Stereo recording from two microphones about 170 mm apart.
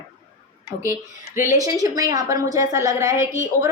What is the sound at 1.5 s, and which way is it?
A woman's voice, 20° right (ahead or behind).